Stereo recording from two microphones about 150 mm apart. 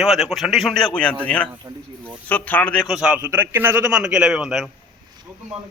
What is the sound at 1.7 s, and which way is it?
Speech, 25° right (ahead or behind).